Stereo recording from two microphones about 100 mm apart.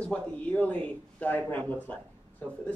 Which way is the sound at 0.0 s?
15° left (ahead or behind).